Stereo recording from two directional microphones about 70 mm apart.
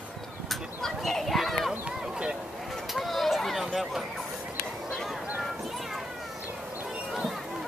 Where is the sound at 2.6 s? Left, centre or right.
Centre.